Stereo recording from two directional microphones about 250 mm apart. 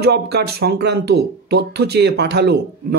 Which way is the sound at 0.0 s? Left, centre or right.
Right.